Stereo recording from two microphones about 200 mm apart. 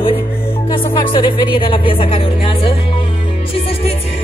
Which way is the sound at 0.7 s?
20° left (ahead or behind).